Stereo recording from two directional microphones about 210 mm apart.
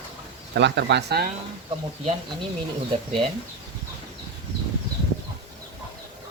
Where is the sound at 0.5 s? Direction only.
55° right (ahead or behind).